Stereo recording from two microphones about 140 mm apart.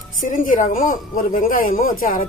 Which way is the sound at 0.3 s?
70° left (ahead or behind).